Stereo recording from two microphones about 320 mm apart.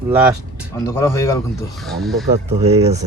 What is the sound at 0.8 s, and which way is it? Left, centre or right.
Speech, centre.